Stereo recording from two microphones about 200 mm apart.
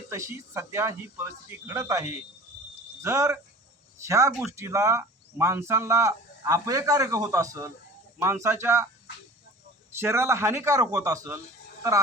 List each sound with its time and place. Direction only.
0.1 s speech: 15° right (ahead or behind)
9.9 s speech: 15° right (ahead or behind)